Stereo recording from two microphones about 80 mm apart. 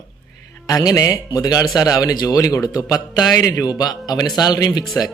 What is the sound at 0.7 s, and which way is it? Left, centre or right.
Speech, left.